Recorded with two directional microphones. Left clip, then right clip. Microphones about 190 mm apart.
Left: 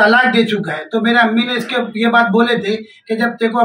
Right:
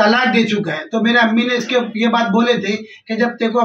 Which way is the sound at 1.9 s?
5° right (ahead or behind).